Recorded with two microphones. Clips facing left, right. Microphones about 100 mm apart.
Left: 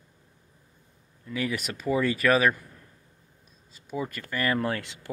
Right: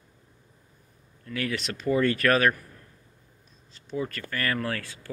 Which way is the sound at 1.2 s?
10° left (ahead or behind).